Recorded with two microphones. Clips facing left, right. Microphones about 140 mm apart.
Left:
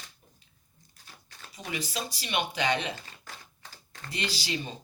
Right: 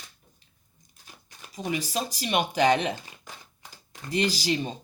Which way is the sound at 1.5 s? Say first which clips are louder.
Right 6 dB; 40° right (ahead or behind).